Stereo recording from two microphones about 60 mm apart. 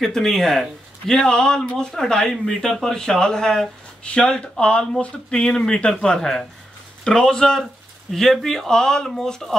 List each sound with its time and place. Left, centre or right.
0.0 s speech: centre